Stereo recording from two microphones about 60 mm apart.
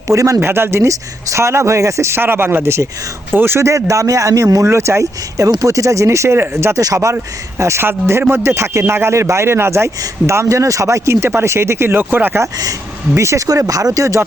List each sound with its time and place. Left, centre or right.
0.1 s speech: right
0.3 s speech: right
0.9 s speech: right
2.2 s speech: right
3.7 s speech: right
4.6 s speech: right
5.5 s speech: right
6.7 s speech: right
7.8 s speech: right
13.1 s speech: right